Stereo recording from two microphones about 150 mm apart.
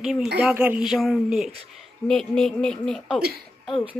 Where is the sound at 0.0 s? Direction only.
Centre (ahead or behind).